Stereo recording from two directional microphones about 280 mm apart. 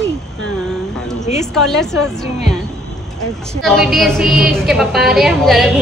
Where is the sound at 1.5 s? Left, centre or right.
Centre.